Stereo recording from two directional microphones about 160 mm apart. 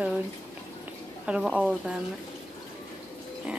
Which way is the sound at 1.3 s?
5° right (ahead or behind).